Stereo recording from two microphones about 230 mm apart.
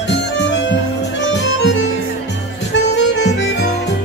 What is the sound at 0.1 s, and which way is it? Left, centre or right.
Music, left.